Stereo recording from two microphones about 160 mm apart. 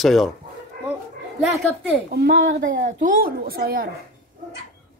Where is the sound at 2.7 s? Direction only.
60° right (ahead or behind).